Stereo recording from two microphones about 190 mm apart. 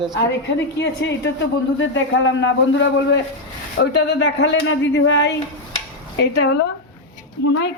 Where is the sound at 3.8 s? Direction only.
65° left (ahead or behind).